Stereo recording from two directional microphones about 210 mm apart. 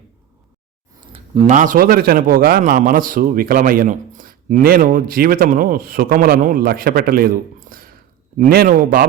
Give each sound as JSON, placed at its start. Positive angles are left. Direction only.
{"t": 1.1, "sound": "speech", "side_deg": -25}